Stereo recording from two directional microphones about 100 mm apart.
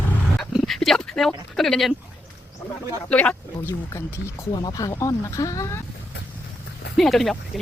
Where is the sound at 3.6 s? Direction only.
25° left (ahead or behind).